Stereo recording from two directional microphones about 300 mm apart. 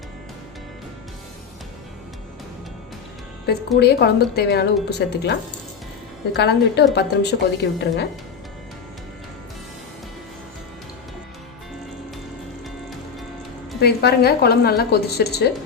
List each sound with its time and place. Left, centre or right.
3.8 s a woman's voice: left
13.8 s a woman's voice: left